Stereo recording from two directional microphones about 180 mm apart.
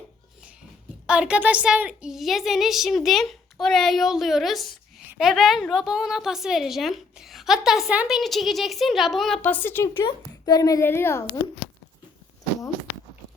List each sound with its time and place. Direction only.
1.0 s a woman's voice: 5° right (ahead or behind); by 9.9 s 10° left (ahead or behind)
10.0 s a child's voice: 25° left (ahead or behind)